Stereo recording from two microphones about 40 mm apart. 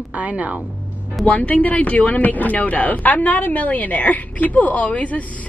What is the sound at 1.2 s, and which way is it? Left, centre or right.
Speech, left.